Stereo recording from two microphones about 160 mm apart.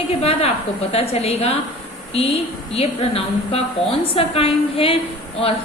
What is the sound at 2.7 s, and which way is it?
A woman's voice, 40° left (ahead or behind).